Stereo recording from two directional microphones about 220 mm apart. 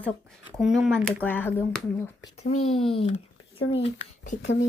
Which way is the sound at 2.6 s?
25° left (ahead or behind).